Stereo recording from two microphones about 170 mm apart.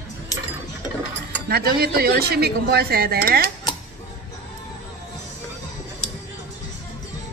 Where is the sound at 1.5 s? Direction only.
65° right (ahead or behind).